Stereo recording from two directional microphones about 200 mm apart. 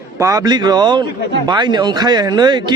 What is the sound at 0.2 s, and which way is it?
A man's voice, 15° right (ahead or behind).